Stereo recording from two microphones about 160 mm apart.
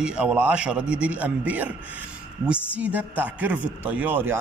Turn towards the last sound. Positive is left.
turn(degrees=-10)  # may be behind; listen again after turning